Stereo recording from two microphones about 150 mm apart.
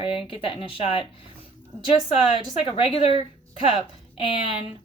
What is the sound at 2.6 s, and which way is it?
Speech, 40° left (ahead or behind).